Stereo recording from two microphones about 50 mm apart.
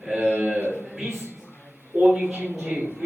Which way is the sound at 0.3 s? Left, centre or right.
Right.